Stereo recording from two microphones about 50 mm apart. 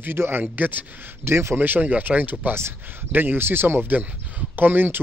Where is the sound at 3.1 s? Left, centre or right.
Right.